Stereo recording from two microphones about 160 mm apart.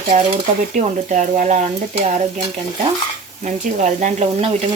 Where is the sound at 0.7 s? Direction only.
50° right (ahead or behind).